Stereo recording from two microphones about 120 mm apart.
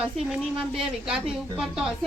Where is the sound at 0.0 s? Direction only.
5° right (ahead or behind).